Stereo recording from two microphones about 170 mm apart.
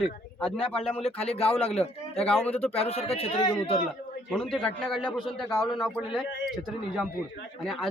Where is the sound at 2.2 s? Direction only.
5° left (ahead or behind).